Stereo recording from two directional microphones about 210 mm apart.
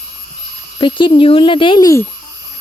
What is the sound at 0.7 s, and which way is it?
Speech, 25° left (ahead or behind).